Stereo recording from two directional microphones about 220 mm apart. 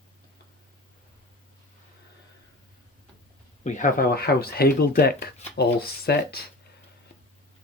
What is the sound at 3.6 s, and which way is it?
Speech, 35° left (ahead or behind).